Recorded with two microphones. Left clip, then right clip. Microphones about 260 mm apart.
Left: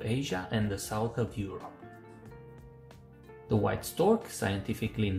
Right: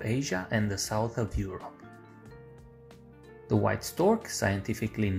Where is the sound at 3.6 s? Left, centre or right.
Centre.